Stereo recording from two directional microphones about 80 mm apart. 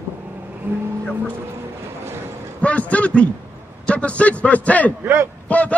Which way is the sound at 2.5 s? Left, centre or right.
Centre.